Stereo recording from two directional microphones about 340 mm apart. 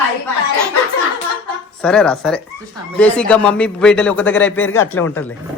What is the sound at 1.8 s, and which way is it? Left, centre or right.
A man's voice, centre.